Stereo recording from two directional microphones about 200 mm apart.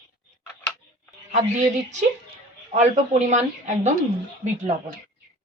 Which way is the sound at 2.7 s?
35° right (ahead or behind).